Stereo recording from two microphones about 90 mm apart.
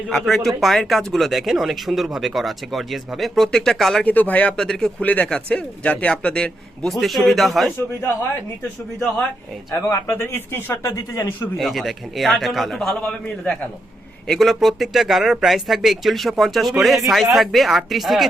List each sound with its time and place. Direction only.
0.1 s speech: 5° left (ahead or behind)
4.0 s speech: 20° left (ahead or behind)
6.9 s speech: centre (ahead or behind)
9.7 s speech: 30° left (ahead or behind)
10.9 s a man's voice: 35° left (ahead or behind)
11.5 s speech: centre (ahead or behind)
13.2 s speech: 15° left (ahead or behind)
14.3 s speech: centre (ahead or behind)